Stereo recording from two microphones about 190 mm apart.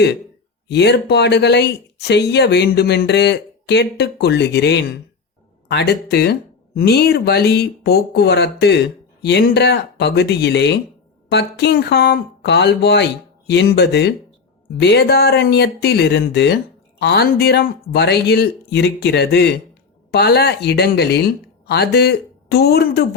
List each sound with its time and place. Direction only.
0.7 s speech: 60° left (ahead or behind)